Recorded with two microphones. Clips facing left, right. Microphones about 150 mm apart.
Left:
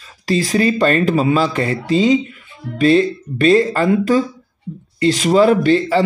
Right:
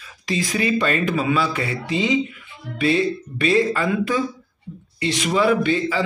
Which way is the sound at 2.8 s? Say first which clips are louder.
Left 6 dB; 40° left (ahead or behind).